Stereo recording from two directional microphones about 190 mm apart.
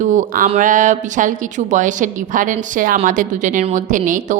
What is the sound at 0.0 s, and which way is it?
Speech, 40° right (ahead or behind).